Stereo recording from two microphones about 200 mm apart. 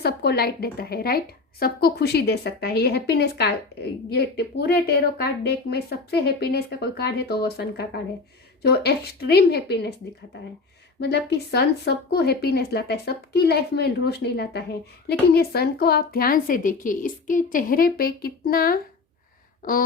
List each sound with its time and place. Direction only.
0.0 s a woman's voice: 55° left (ahead or behind)
11.0 s a woman's voice: 55° left (ahead or behind)